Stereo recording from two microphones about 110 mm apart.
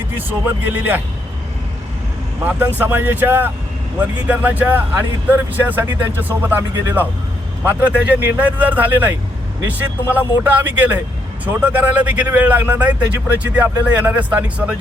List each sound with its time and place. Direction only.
0.3 s speech: 15° right (ahead or behind)
2.4 s speech: 15° right (ahead or behind)